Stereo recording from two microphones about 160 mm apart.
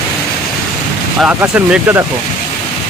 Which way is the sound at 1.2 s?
10° right (ahead or behind).